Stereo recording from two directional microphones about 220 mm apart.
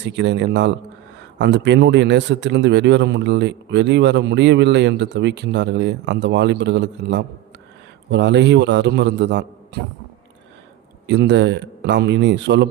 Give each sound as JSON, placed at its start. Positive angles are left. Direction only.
{"t": 0.0, "sound": "a man's voice", "side_deg": -55}
{"t": 11.0, "sound": "a man's voice", "side_deg": -50}